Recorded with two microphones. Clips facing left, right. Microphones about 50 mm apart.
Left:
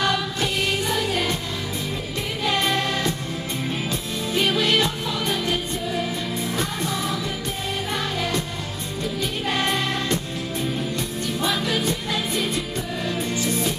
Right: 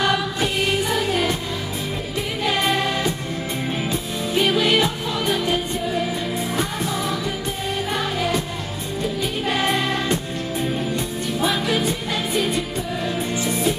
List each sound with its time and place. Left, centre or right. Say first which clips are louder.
0.0 s music: right 2 dB; centre
2.4 s music: right 2 dB; centre
11.3 s music: right 3 dB; centre